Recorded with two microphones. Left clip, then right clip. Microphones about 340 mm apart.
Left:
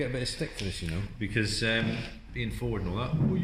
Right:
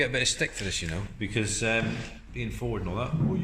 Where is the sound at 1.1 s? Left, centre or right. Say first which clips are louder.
Even; centre.